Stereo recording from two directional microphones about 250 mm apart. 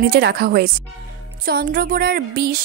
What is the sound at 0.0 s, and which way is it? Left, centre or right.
A woman's voice, right.